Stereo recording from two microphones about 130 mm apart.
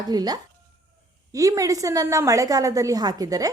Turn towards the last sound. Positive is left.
turn(degrees=-25)  # may be behind; listen again after turning